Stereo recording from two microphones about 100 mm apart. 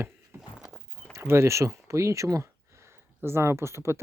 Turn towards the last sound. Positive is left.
turn(degrees=-25)  # may be behind; listen again after turning